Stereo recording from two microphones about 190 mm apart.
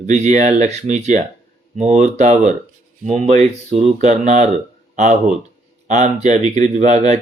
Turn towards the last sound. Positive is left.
turn(degrees=-35)  # may be behind; listen again after turning